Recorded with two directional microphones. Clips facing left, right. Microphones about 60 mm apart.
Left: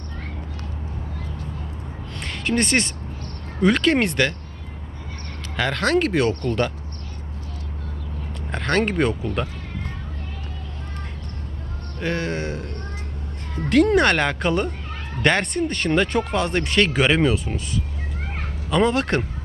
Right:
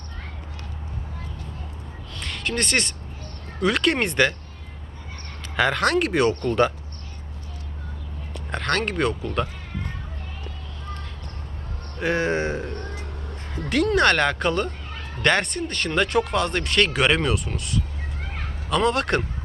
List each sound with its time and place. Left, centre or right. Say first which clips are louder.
2.2 s speech: left 4 dB; centre
3.6 s speech: left 3 dB; centre
5.5 s speech: even; centre
8.5 s speech: left 3 dB; centre
11.9 s speech: right 2 dB; centre
12.2 s speech: right 3 dB; right
13.9 s speech: left 1 dB; centre
18.9 s speech: left 1 dB; centre